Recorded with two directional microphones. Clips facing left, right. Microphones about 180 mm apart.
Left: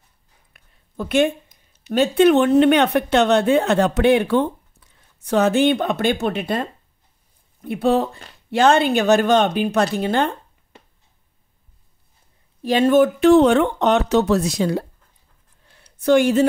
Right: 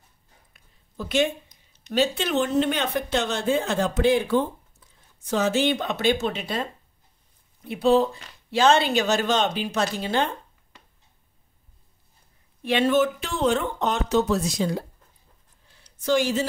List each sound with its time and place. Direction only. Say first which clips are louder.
0.5 s speech: left 2 dB; 55° left (ahead or behind)
12.6 s speech: left 6 dB; 45° left (ahead or behind); by 14.9 s 65° left (ahead or behind)
15.7 s a sound: left 7 dB; 60° left (ahead or behind)